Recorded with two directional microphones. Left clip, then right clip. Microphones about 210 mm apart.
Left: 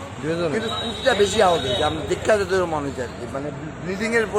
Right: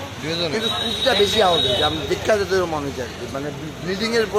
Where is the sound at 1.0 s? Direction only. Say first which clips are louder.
Even; 5° left (ahead or behind).